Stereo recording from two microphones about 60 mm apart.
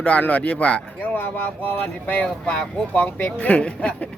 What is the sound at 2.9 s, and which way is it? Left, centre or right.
Speech, left.